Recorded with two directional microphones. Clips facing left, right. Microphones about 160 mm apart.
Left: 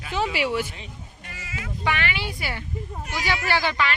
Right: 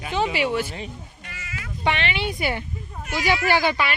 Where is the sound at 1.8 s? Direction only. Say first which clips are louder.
Right 3 dB; 25° right (ahead or behind).